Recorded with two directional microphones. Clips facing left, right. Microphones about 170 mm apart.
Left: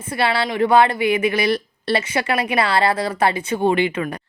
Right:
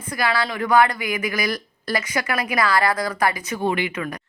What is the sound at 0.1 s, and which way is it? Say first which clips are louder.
Speech: left 3 dB; 30° left (ahead or behind).